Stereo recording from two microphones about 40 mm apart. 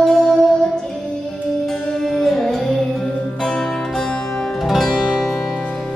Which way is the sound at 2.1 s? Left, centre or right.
Centre.